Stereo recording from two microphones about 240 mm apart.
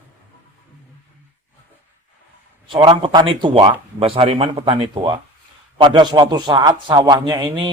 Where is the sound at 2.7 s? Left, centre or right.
Right.